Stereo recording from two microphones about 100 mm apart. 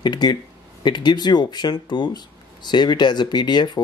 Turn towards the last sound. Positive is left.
turn(degrees=50)  # may be behind; listen again after turning